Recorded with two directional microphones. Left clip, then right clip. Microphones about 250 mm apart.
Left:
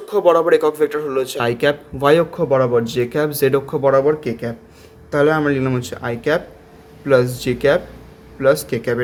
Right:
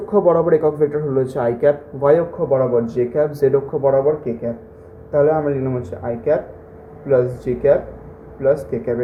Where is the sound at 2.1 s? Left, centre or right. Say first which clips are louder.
Left 3 dB; left.